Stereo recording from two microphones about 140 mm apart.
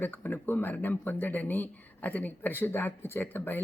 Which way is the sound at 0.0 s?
15° left (ahead or behind).